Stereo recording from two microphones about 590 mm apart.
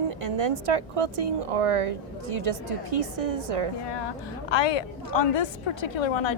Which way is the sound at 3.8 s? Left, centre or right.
Left.